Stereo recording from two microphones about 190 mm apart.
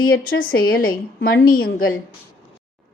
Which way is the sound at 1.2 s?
50° left (ahead or behind).